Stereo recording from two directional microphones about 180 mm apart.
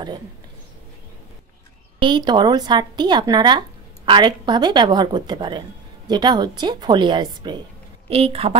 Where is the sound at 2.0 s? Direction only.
25° right (ahead or behind).